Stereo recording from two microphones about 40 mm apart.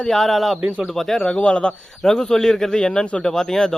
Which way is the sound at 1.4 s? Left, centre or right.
Left.